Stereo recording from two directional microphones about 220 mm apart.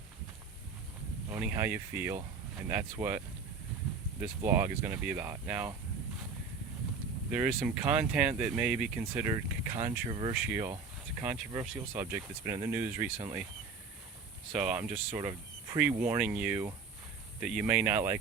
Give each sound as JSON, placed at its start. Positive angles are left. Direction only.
{"t": 1.3, "sound": "speech", "side_deg": -10}
{"t": 4.2, "sound": "speech", "side_deg": -10}
{"t": 7.3, "sound": "speech", "side_deg": -5}
{"t": 10.1, "sound": "speech", "side_deg": -25}
{"t": 10.3, "sound": "speech", "side_deg": -5}
{"t": 14.5, "sound": "speech", "side_deg": -5}